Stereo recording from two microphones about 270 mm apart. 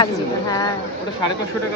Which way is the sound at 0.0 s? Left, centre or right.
Centre.